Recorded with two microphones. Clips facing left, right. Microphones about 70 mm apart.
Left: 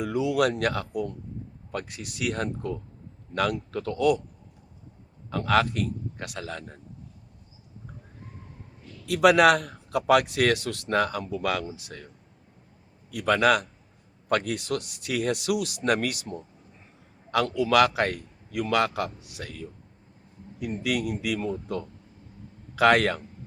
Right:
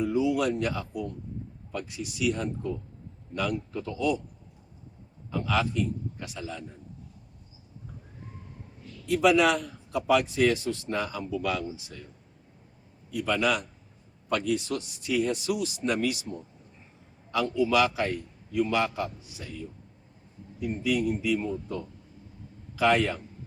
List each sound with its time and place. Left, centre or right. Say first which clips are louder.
0.0 s a man's voice: left 1 dB; left
5.3 s a man's voice: left 4 dB; left
9.0 s a man's voice: left 4 dB; left
13.1 s a man's voice: left 5 dB; left
17.3 s a man's voice: left 3 dB; left